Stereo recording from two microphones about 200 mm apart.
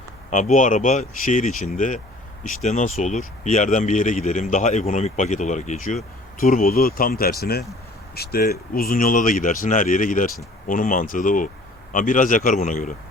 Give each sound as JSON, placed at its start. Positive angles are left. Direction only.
{"t": 0.3, "sound": "speech", "side_deg": 40}